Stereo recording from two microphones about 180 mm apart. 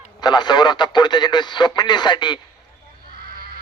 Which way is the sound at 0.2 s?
25° left (ahead or behind).